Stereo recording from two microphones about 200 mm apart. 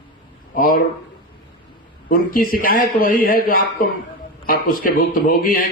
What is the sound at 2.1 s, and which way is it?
A man's voice, 45° left (ahead or behind).